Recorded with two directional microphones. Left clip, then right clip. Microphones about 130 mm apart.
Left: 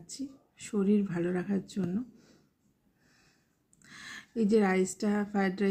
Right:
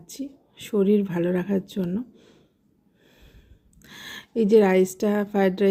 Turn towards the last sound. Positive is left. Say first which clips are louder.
# right 10 dB
turn(degrees=-35)  # may be behind; listen again after turning